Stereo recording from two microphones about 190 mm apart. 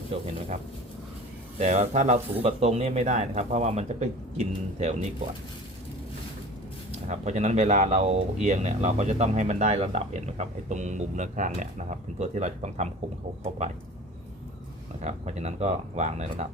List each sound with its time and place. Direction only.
0.1 s speech: 35° right (ahead or behind)
6.9 s speech: 35° right (ahead or behind)
15.0 s speech: 35° right (ahead or behind)